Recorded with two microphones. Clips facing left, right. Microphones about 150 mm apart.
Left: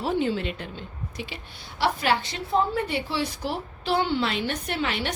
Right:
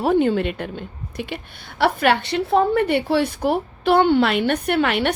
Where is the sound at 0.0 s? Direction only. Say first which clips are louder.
Right 8 dB; 55° right (ahead or behind).